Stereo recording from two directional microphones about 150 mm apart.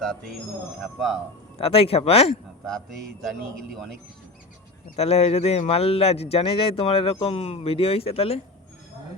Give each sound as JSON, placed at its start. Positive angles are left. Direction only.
{"t": 0.0, "sound": "a man's voice", "side_deg": 5}
{"t": 1.5, "sound": "speech", "side_deg": 40}
{"t": 3.2, "sound": "a man's voice", "side_deg": 0}
{"t": 4.9, "sound": "speech", "side_deg": 45}